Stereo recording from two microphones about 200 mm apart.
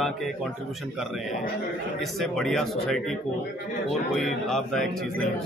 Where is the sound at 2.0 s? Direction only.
Centre (ahead or behind).